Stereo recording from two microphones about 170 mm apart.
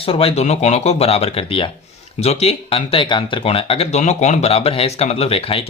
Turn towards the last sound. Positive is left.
turn(degrees=35)  # may be behind; listen again after turning